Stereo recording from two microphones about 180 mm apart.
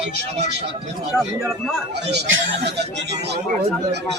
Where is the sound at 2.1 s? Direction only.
80° right.